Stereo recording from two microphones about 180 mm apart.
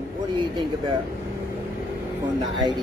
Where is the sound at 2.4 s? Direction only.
25° right (ahead or behind).